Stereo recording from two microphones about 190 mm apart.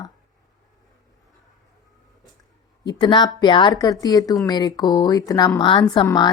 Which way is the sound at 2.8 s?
20° left (ahead or behind).